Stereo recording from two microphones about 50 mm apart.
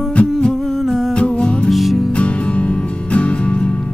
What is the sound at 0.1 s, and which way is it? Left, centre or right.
Humming, left.